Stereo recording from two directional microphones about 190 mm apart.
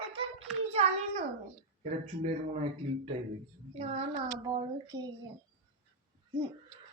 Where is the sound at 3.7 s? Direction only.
30° right (ahead or behind).